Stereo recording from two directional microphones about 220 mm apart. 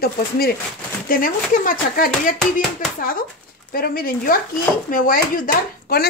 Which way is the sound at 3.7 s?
40° left (ahead or behind).